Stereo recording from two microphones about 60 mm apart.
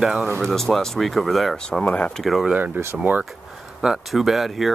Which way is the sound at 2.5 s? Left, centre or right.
Right.